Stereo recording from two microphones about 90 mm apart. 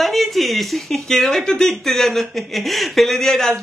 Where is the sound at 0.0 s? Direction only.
Centre (ahead or behind).